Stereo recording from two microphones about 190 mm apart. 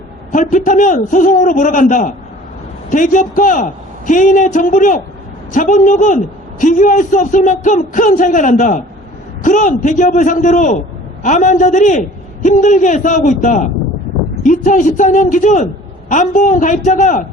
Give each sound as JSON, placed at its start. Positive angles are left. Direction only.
{"t": 0.3, "sound": "a man's voice", "side_deg": 40}